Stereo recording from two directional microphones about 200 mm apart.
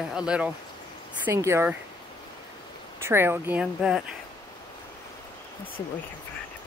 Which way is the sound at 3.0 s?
10° right (ahead or behind).